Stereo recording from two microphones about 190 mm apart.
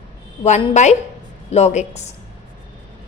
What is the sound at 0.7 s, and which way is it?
A woman's voice, 40° left (ahead or behind).